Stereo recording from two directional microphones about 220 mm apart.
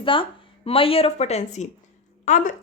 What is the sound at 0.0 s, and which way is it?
Speech, 25° left (ahead or behind).